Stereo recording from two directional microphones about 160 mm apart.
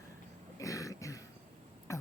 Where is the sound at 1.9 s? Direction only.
20° left (ahead or behind).